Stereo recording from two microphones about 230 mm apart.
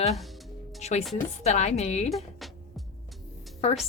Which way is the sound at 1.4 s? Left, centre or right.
Left.